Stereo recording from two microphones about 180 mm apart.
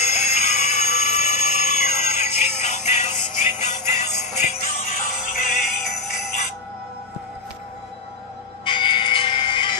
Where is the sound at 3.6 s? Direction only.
40° left (ahead or behind).